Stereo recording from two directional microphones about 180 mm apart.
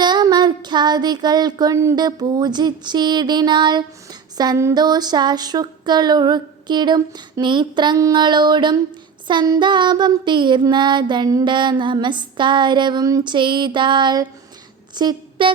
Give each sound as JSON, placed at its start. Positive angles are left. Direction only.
{"t": 0.0, "sound": "child singing", "side_deg": -25}
{"t": 14.9, "sound": "speech", "side_deg": -25}